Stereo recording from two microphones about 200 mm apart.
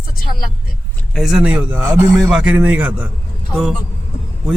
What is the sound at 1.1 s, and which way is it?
A man's voice, centre (ahead or behind).